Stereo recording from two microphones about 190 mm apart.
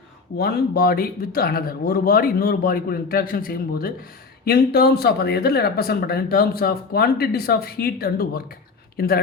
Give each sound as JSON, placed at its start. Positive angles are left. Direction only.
{"t": 0.3, "sound": "speech", "side_deg": 55}